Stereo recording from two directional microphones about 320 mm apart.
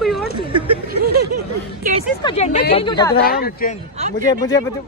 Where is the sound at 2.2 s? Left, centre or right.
Centre.